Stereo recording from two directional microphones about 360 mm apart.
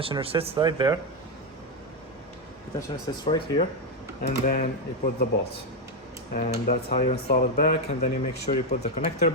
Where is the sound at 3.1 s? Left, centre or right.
Centre.